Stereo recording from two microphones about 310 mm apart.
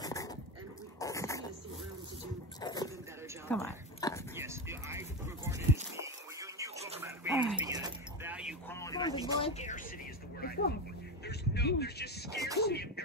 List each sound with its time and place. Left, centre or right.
0.0 s dog: centre
2.6 s music: centre
3.4 s dog: centre
4.4 s a sound: centre
8.7 s vehicle: centre
9.4 s speech: left
10.4 s a sound: left
11.2 s vehicle: left
12.5 s a sound: left